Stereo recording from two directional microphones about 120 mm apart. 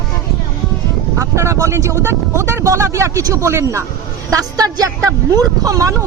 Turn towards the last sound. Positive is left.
turn(degrees=-30)  # may be behind; listen again after turning